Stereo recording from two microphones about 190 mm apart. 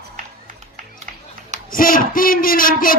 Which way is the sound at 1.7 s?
50° left (ahead or behind).